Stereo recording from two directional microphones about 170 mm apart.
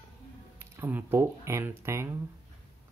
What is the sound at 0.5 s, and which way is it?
Speech, 15° right (ahead or behind).